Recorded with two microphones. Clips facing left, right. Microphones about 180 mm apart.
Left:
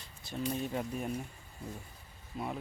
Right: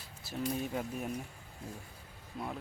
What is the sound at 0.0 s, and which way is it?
Speech, 5° right (ahead or behind).